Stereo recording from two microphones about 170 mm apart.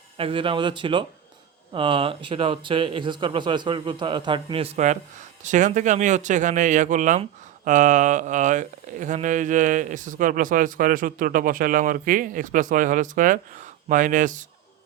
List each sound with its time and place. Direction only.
0.2 s speech: 30° right (ahead or behind); by 14.4 s 50° right (ahead or behind)